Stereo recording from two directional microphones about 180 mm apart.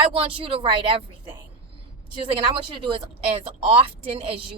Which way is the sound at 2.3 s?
30° right (ahead or behind).